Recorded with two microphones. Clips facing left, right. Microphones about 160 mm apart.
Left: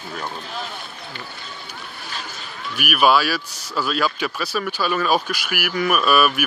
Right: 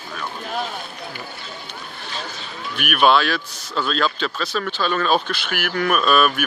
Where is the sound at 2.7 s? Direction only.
5° left (ahead or behind).